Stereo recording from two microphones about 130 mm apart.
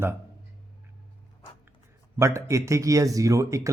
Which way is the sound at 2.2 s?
20° right (ahead or behind).